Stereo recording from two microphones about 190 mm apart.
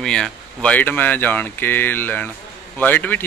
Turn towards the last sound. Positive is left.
turn(degrees=10)  # may be behind; listen again after turning